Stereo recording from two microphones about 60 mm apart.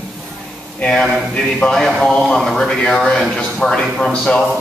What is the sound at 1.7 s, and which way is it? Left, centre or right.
A man's voice, centre.